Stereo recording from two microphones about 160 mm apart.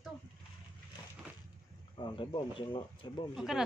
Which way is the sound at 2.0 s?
30° left (ahead or behind).